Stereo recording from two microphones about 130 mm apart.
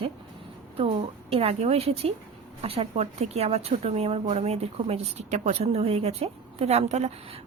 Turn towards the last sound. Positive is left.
turn(degrees=-55)  # may be behind; listen again after turning